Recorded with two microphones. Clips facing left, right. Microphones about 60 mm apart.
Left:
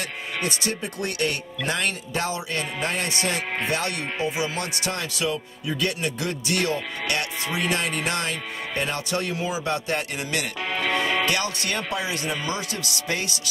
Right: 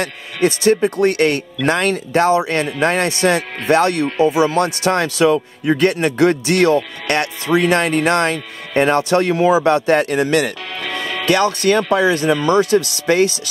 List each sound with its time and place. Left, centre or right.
0.7 s speech: right
10.7 s music: centre
11.2 s speech: right